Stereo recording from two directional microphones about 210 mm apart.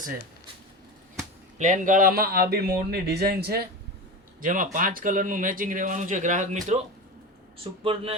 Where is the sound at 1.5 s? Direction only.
35° right (ahead or behind).